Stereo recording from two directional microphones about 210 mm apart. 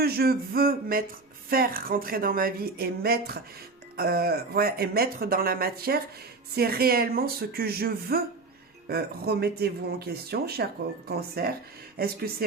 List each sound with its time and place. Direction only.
0.0 s speech: 45° right (ahead or behind)